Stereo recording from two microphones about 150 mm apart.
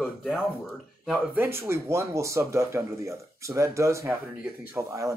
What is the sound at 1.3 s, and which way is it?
Speech, 15° right (ahead or behind).